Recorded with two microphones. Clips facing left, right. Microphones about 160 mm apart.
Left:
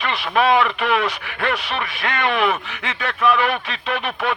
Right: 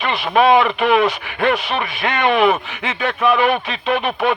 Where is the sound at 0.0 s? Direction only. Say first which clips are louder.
Right 4 dB; 25° right (ahead or behind).